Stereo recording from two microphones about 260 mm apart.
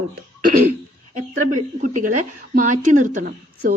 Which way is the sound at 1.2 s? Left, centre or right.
Right.